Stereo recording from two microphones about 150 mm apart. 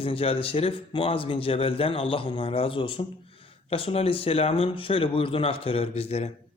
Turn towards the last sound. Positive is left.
turn(degrees=45)  # may be behind; listen again after turning